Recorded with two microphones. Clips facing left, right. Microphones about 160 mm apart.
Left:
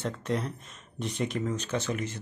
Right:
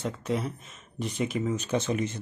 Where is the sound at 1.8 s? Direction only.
20° right (ahead or behind).